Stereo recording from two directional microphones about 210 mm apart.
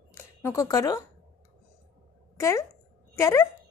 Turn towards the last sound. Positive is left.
turn(degrees=15)  # may be behind; listen again after turning